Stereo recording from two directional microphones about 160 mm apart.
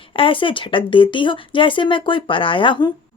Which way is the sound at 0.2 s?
30° left (ahead or behind).